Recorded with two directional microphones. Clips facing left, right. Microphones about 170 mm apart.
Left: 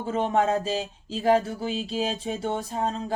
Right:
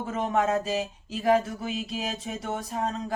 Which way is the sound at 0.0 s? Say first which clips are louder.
Left 2 dB; 30° left (ahead or behind).